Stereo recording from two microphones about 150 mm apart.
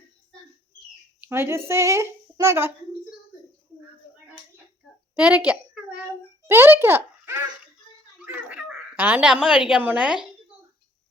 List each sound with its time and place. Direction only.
1.2 s a woman's voice: 15° right (ahead or behind)
5.1 s a woman's voice: 10° right (ahead or behind)